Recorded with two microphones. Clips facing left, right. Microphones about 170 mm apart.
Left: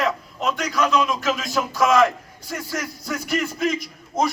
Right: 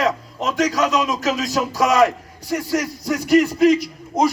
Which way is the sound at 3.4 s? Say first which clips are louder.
Right 9 dB; 35° right (ahead or behind).